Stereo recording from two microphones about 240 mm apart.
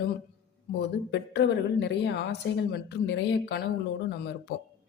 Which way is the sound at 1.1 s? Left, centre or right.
Left.